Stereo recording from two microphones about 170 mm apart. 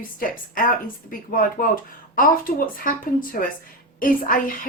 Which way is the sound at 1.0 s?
55° left (ahead or behind).